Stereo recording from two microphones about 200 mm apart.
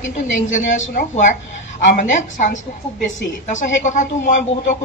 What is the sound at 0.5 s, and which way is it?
Speech, 40° left (ahead or behind).